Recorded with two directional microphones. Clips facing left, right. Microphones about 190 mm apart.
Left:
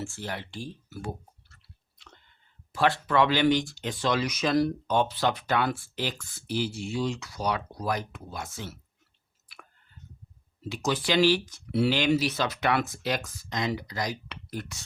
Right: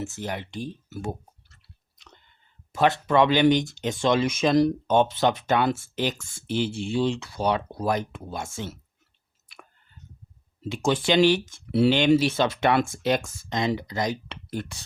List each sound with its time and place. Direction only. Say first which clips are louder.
0.0 s speech: right 4 dB; 20° right (ahead or behind)
2.0 s chewing: right 1 dB; 20° right (ahead or behind)
2.7 s speech: right 3 dB; 20° right (ahead or behind)
9.5 s chewing: right 3 dB; 25° right (ahead or behind)
10.6 s speech: right 5 dB; 25° right (ahead or behind)